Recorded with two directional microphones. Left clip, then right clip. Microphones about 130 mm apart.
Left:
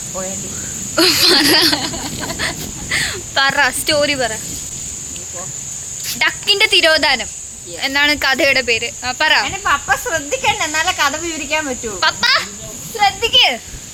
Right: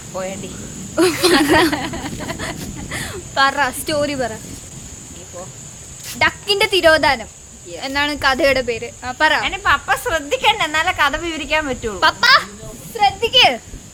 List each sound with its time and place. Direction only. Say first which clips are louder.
0.9 s speech: left 3 dB; 20° right (ahead or behind); by 4.4 s centre (ahead or behind)
6.1 s speech: left 2 dB; centre (ahead or behind)
12.0 s a child's voice: right 2 dB; 30° right (ahead or behind)
13.2 s a child's voice: left 2 dB; 40° right (ahead or behind)